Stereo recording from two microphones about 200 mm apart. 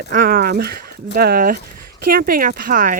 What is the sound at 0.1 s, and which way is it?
Speech, 45° right (ahead or behind).